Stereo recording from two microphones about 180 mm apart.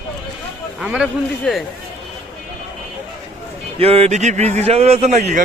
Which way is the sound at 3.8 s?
35° right (ahead or behind).